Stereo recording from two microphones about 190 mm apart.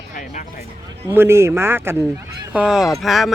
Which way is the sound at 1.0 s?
15° right (ahead or behind).